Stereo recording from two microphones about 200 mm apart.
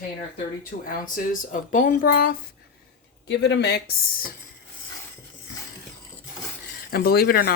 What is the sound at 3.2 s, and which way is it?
Speech, 60° left (ahead or behind).